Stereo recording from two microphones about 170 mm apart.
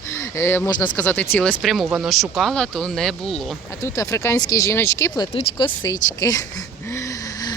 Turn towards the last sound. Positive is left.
turn(degrees=20)  # may be behind; listen again after turning